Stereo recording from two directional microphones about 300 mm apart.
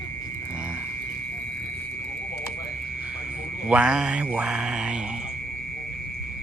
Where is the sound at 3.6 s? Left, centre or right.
Centre.